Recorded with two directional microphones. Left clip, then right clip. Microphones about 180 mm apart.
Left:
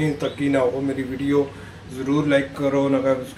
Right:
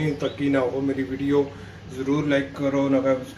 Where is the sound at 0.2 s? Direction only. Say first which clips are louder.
Left 1 dB; centre (ahead or behind).